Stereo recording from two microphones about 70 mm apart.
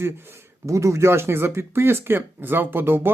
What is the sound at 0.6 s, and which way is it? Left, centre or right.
Speech, right.